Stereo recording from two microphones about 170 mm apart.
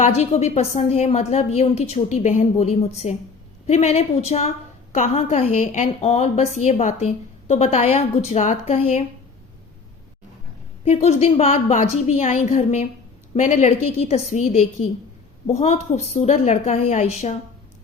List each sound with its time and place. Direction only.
0.0 s a woman's voice: 40° left (ahead or behind)
10.8 s a woman's voice: 40° left (ahead or behind)